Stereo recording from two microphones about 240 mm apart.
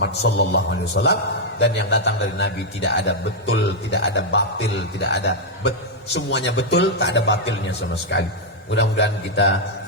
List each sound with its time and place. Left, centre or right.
0.0 s a man's voice: left